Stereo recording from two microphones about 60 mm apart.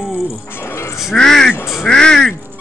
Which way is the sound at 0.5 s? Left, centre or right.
Left.